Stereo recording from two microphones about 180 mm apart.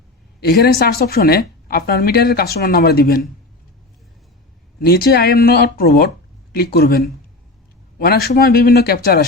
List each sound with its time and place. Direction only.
0.3 s speech: 60° left (ahead or behind)
4.8 s speech: 60° left (ahead or behind)